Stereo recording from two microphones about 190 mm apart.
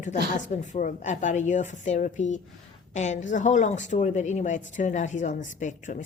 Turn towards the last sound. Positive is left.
turn(degrees=40)  # may be behind; listen again after turning